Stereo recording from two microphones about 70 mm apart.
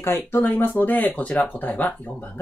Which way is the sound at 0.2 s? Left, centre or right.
Left.